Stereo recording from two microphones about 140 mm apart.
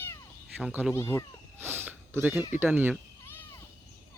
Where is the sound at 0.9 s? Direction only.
20° left (ahead or behind).